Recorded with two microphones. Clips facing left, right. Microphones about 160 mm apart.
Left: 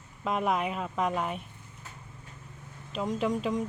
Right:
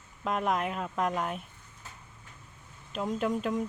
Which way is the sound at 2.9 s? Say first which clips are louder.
Left 1 dB; centre (ahead or behind).